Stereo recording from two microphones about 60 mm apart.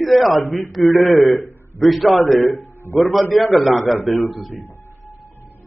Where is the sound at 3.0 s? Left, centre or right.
Centre.